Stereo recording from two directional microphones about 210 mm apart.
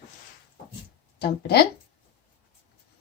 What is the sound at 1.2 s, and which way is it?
Speech, 50° left (ahead or behind).